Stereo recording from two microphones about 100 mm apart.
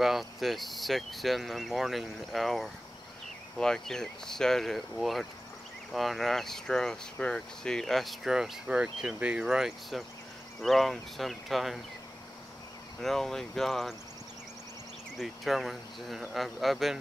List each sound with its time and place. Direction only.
0.0 s speech: centre (ahead or behind)
13.0 s speech: 5° left (ahead or behind)
15.1 s speech: centre (ahead or behind)